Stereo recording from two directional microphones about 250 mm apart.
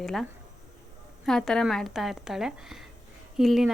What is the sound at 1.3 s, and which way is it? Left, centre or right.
A woman's voice, centre.